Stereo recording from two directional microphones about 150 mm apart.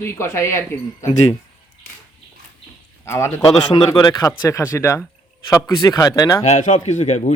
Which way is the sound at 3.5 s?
30° left (ahead or behind).